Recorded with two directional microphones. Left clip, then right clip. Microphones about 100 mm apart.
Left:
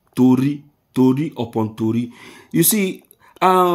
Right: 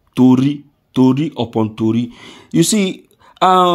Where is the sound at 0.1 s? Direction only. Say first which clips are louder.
Right 4 dB; 20° right (ahead or behind).